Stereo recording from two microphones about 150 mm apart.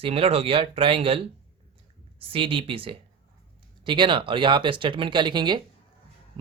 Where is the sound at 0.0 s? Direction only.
40° right (ahead or behind).